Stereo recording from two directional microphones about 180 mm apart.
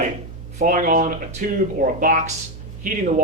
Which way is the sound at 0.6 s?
50° right (ahead or behind).